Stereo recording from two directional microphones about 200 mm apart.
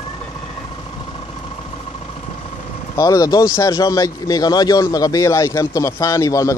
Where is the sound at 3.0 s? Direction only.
15° left (ahead or behind).